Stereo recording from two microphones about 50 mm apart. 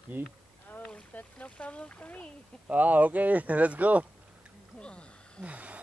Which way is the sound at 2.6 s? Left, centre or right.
Right.